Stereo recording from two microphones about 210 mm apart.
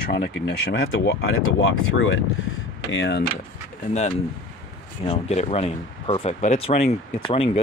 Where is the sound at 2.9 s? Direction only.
55° left (ahead or behind).